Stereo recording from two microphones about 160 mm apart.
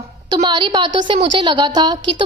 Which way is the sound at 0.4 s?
30° right (ahead or behind).